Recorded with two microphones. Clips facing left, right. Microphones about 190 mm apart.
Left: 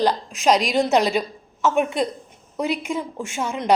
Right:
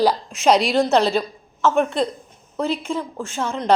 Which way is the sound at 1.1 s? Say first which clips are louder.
Right 1 dB; 5° left (ahead or behind).